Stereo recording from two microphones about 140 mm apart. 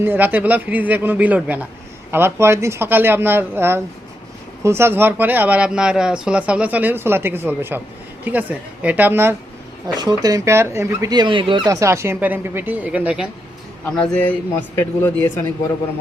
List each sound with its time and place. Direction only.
0.0 s speech: 15° right (ahead or behind)
10.0 s speech: 30° right (ahead or behind); by 13.2 s 10° right (ahead or behind)
14.0 s a man's voice: 10° left (ahead or behind)